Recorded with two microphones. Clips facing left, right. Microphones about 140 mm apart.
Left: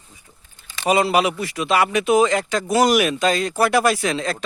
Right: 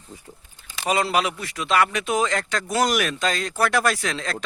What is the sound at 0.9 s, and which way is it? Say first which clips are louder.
Speech: left 5 dB; 10° left (ahead or behind).